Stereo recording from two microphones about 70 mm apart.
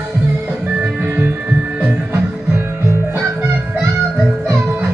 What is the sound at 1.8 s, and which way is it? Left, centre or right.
Music, right.